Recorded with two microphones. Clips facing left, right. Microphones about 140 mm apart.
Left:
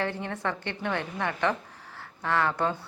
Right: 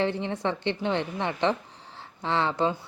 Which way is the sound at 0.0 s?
20° right (ahead or behind).